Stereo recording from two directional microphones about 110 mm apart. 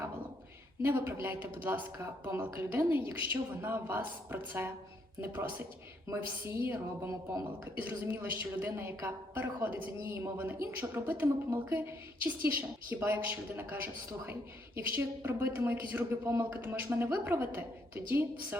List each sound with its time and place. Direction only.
0.8 s a woman's voice: 15° right (ahead or behind)